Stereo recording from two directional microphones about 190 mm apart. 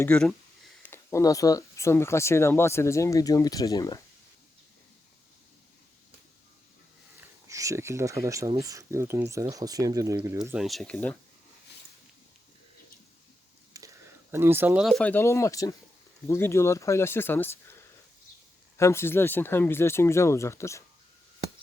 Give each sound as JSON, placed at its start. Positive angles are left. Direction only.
{"t": 0.0, "sound": "speech", "side_deg": 5}
{"t": 7.4, "sound": "speech", "side_deg": -15}
{"t": 10.4, "sound": "speech", "side_deg": -5}
{"t": 13.7, "sound": "a sound", "side_deg": -15}
{"t": 14.8, "sound": "speech", "side_deg": 5}
{"t": 18.8, "sound": "speech", "side_deg": 15}